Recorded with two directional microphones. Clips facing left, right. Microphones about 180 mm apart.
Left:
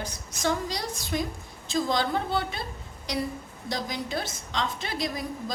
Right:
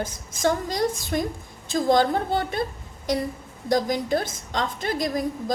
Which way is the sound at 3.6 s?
45° right (ahead or behind).